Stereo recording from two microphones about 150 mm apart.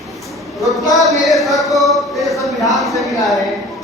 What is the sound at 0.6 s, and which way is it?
Speech, centre (ahead or behind).